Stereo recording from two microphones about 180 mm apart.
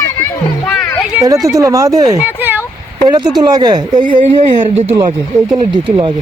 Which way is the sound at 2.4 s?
10° right (ahead or behind).